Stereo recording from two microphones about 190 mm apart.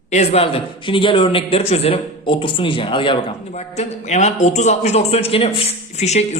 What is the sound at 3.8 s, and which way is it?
A man's voice, 40° left (ahead or behind).